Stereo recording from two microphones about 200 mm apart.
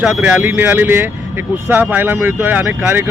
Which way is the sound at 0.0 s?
5° right (ahead or behind).